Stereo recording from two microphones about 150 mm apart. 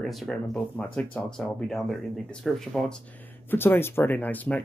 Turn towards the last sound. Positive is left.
turn(degrees=10)  # may be behind; listen again after turning